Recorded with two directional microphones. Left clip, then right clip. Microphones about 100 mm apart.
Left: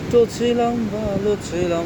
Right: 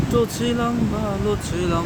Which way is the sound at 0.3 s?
65° right (ahead or behind).